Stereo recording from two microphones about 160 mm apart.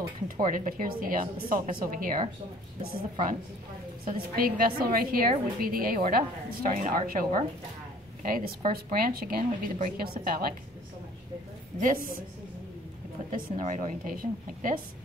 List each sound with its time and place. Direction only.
0.5 s a woman's voice: 60° right (ahead or behind)
4.4 s a woman's voice: 65° right (ahead or behind)
11.8 s a woman's voice: 60° right (ahead or behind)
13.3 s a woman's voice: 55° right (ahead or behind)